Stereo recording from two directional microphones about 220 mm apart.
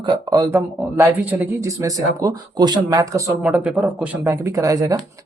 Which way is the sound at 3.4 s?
5° right (ahead or behind).